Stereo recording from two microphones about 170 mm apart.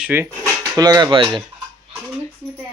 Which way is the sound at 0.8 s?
25° right (ahead or behind).